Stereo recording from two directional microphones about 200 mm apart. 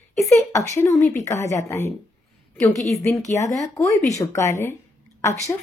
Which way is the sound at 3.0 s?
15° left (ahead or behind).